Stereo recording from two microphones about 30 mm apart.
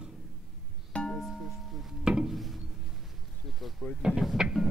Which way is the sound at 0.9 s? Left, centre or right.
Left.